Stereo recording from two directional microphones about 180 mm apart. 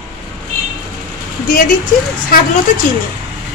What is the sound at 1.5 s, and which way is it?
Speech, 50° left (ahead or behind).